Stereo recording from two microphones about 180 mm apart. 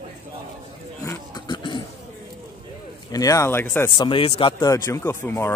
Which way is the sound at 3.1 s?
20° left (ahead or behind).